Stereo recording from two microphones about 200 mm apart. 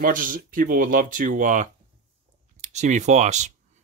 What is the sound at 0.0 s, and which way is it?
Speech, 40° right (ahead or behind).